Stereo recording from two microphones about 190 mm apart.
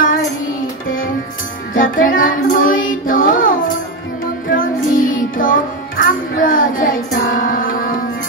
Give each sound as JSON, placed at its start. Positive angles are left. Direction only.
{"t": 1.8, "sound": "child singing", "side_deg": 45}
{"t": 4.5, "sound": "music", "side_deg": 45}